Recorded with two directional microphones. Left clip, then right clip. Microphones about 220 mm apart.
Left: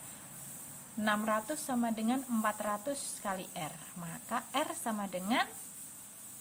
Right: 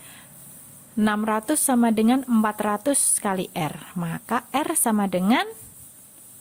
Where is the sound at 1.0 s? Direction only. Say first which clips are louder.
Right 8 dB; 50° right (ahead or behind).